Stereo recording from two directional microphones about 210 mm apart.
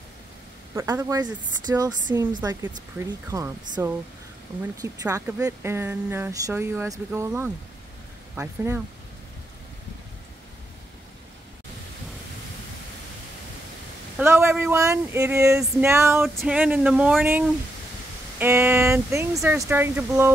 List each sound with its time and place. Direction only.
0.7 s speech: 15° right (ahead or behind)
14.1 s speech: 10° right (ahead or behind)